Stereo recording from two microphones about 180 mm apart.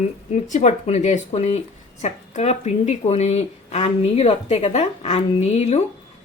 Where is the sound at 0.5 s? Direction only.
40° left (ahead or behind).